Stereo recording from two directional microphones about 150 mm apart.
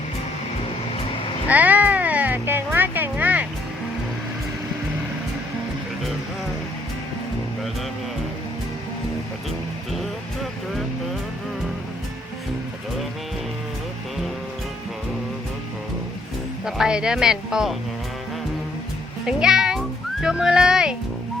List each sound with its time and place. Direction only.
1.5 s music: 10° right (ahead or behind)
16.6 s speech: 5° right (ahead or behind)
19.2 s a child's voice: 5° right (ahead or behind)